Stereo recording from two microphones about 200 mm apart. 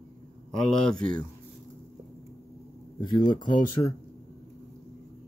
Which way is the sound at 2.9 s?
20° left (ahead or behind).